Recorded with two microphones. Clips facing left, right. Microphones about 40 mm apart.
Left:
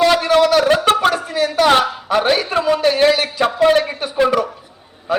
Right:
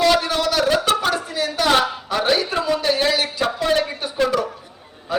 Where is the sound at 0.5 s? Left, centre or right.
Left.